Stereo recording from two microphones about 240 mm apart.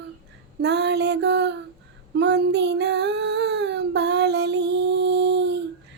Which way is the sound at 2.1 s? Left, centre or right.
Right.